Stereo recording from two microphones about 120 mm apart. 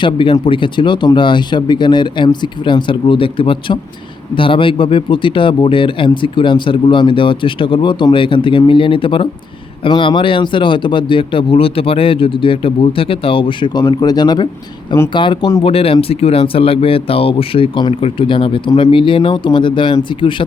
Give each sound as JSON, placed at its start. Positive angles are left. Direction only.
{"t": 0.0, "sound": "speech", "side_deg": 45}
{"t": 15.6, "sound": "speech", "side_deg": 55}